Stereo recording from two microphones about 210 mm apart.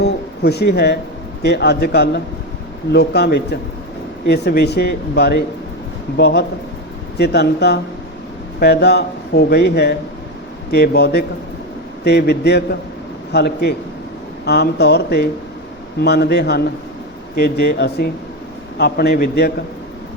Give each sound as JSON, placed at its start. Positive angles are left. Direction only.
{"t": 0.0, "sound": "music", "side_deg": 50}
{"t": 1.4, "sound": "speech", "side_deg": 55}